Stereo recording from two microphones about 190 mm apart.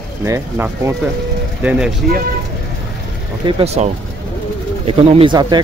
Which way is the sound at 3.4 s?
30° right (ahead or behind).